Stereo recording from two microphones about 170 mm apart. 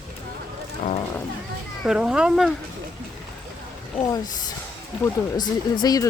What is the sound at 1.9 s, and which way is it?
Speech, 5° right (ahead or behind).